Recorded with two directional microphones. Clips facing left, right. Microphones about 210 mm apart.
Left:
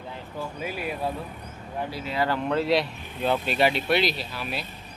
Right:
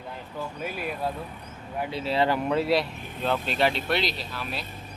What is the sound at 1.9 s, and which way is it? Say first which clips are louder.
Speech: right 4 dB; 30° right (ahead or behind).